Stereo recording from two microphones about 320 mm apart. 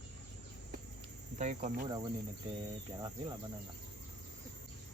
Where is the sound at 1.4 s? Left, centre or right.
Right.